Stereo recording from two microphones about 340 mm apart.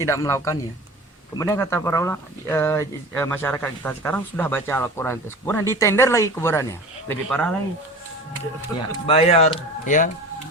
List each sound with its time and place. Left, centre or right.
0.0 s speech: centre
8.9 s speech: centre